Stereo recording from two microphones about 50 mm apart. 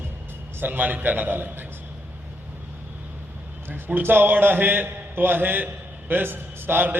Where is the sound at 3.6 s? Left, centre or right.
Right.